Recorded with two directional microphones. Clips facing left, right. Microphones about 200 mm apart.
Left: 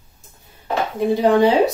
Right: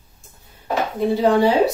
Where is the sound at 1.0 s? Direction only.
15° left (ahead or behind).